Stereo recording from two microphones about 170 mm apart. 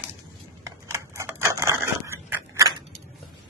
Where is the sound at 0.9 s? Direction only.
15° right (ahead or behind).